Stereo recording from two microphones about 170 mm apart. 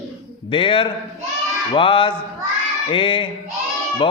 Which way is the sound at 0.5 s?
30° left (ahead or behind).